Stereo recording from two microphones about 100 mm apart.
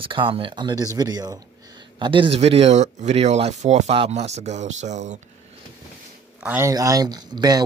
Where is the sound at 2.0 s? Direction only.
55° right (ahead or behind); by 4.4 s 90° right.